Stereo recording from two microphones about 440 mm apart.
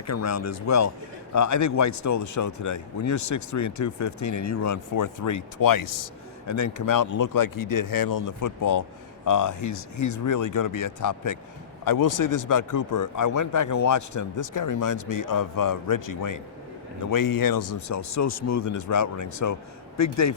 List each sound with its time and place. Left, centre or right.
0.1 s speech: left